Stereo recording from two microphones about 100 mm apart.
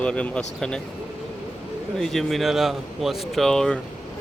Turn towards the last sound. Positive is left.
turn(degrees=5)  # may be behind; listen again after turning